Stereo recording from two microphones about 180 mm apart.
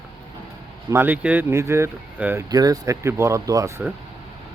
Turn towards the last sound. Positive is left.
turn(degrees=-15)  # may be behind; listen again after turning